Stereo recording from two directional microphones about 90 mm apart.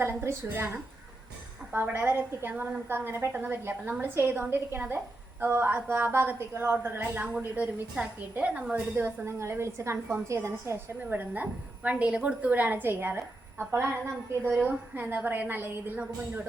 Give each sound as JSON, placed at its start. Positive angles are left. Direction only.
{"t": 0.0, "sound": "a woman's voice", "side_deg": -25}
{"t": 9.0, "sound": "a woman's voice", "side_deg": -25}